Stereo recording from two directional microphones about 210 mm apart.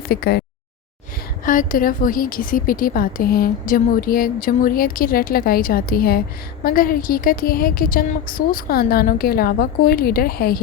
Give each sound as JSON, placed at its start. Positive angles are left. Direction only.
{"t": 0.1, "sound": "a woman's voice", "side_deg": 50}
{"t": 1.5, "sound": "a woman's voice", "side_deg": 40}